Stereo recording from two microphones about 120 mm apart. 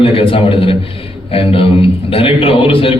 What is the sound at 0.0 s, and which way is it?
A man's voice, 50° left (ahead or behind).